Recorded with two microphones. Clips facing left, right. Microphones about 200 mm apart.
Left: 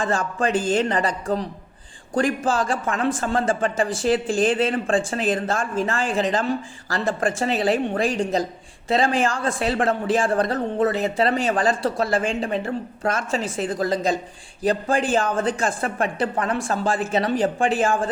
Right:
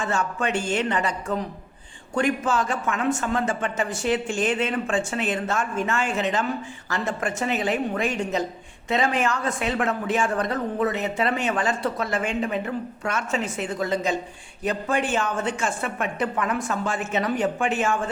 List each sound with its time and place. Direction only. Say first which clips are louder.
0.0 s speech: left 3 dB; 35° left (ahead or behind)